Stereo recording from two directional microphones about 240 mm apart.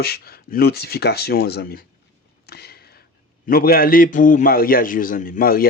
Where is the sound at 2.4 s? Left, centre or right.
Left.